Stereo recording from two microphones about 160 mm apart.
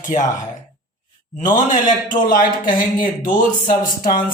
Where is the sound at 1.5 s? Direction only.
55° left (ahead or behind).